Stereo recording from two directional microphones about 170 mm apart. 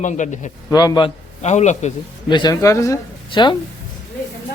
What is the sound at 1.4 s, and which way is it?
Speech, 45° left (ahead or behind).